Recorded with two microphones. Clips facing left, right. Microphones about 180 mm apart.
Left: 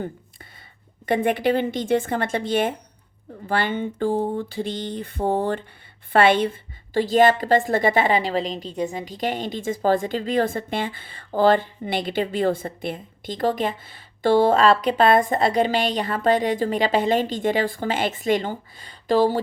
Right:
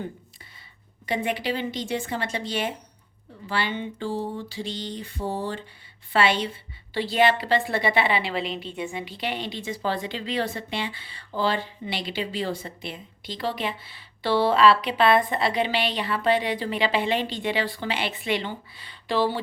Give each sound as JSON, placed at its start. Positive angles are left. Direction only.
{"t": 1.0, "sound": "a woman's voice", "side_deg": 50}